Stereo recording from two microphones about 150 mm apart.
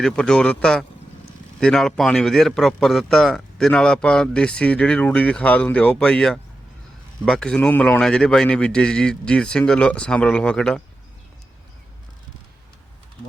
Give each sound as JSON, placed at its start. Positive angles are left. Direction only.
{"t": 0.0, "sound": "a man's voice", "side_deg": 5}